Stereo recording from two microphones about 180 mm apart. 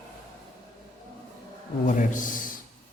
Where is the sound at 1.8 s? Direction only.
45° left (ahead or behind).